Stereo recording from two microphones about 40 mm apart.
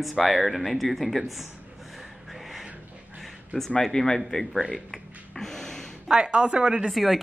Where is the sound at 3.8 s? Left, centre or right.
Centre.